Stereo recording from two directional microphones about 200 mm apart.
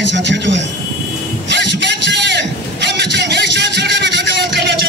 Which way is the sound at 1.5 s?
60° right (ahead or behind).